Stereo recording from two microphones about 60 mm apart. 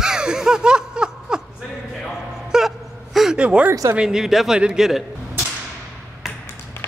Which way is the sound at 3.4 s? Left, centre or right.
Centre.